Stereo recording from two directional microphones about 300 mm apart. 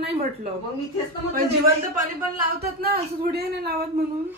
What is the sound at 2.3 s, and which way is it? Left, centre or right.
Speech, right.